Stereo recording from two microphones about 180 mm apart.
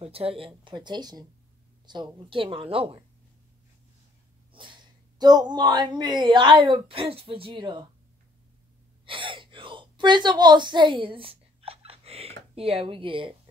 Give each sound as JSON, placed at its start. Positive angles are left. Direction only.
{"t": 0.0, "sound": "speech", "side_deg": -30}
{"t": 4.5, "sound": "dog", "side_deg": -25}
{"t": 5.2, "sound": "speech", "side_deg": -25}
{"t": 9.0, "sound": "a sound", "side_deg": -30}